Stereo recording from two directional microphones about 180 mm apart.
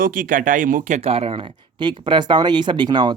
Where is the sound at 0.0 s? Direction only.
45° right (ahead or behind).